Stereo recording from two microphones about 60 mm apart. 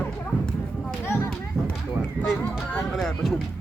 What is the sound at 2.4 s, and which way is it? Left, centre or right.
Speech, left.